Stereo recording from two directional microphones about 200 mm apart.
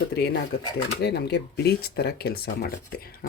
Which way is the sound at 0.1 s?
55° left (ahead or behind).